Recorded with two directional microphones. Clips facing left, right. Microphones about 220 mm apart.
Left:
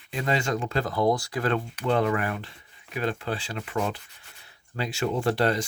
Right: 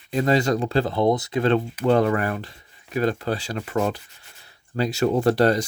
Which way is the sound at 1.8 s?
40° right (ahead or behind).